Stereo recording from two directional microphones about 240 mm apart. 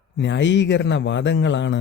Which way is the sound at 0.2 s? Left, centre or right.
Left.